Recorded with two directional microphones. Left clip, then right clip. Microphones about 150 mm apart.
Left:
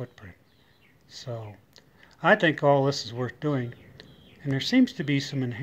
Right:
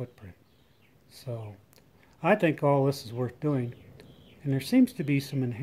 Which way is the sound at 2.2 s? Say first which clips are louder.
Left 4 dB; 15° right (ahead or behind).